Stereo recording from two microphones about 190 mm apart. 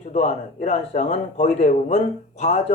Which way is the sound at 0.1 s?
40° left (ahead or behind).